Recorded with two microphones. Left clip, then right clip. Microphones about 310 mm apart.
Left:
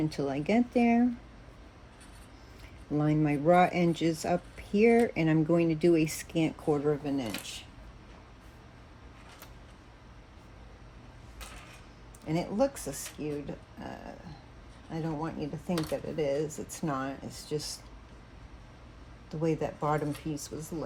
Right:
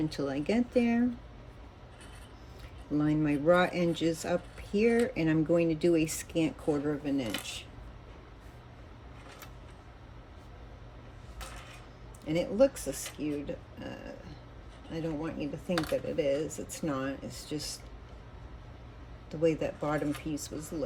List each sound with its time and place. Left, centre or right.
0.1 s speech: centre
3.0 s speech: centre
12.3 s speech: centre
14.9 s speech: centre
19.3 s speech: centre